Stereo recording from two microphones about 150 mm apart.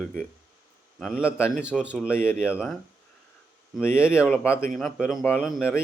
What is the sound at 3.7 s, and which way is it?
Speech, 15° left (ahead or behind).